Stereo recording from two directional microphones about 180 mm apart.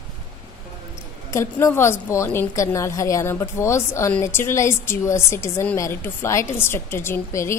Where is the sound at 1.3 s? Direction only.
15° left (ahead or behind).